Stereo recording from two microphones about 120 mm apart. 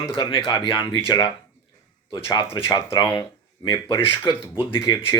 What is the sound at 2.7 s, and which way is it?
Speech, 35° left (ahead or behind).